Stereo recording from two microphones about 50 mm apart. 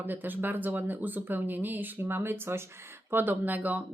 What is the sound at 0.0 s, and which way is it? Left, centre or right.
Speech, right.